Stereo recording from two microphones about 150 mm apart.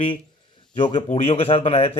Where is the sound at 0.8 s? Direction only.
50° left (ahead or behind).